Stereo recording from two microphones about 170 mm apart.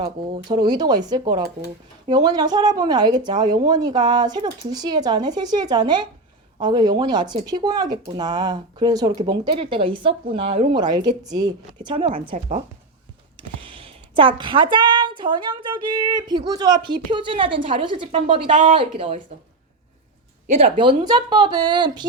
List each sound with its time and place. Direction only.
0.0 s a woman's voice: 30° right (ahead or behind)
13.7 s a woman's voice: 30° right (ahead or behind)
20.7 s a woman's voice: 25° right (ahead or behind)